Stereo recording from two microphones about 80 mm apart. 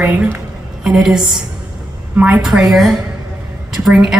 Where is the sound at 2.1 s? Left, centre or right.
Centre.